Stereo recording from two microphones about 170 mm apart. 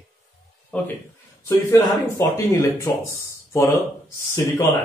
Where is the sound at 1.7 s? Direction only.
20° left (ahead or behind).